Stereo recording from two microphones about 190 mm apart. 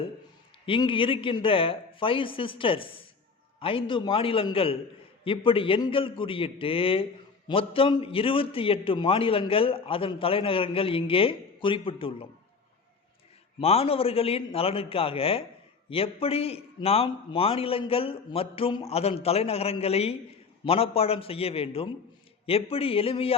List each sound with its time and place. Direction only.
0.6 s a man's voice: 25° left (ahead or behind)
13.6 s a man's voice: 30° left (ahead or behind)